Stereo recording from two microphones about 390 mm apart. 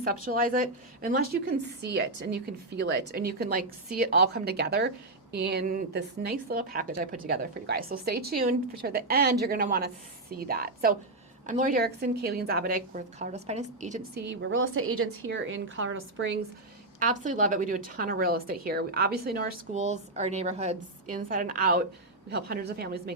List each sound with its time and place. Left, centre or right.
0.3 s a woman's voice: right
17.0 s a woman's voice: centre